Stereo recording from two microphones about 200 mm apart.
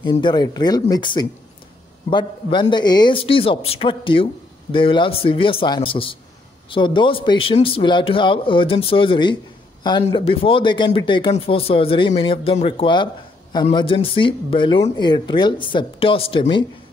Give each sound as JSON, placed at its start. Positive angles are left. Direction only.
{"t": 0.0, "sound": "speech", "side_deg": 25}